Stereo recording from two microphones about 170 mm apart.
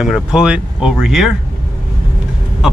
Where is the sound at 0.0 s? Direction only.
5° right (ahead or behind).